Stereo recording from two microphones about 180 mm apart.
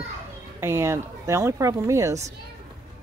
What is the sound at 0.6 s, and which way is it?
Speech, 15° right (ahead or behind).